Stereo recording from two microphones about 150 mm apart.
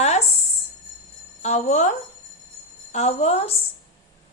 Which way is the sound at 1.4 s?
50° left (ahead or behind).